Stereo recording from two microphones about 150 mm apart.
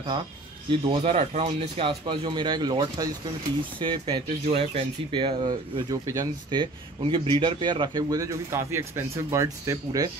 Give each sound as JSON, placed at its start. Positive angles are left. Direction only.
{"t": 0.7, "sound": "speech", "side_deg": -35}